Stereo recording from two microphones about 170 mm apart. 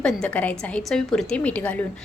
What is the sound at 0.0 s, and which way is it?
A woman's voice, 5° left (ahead or behind).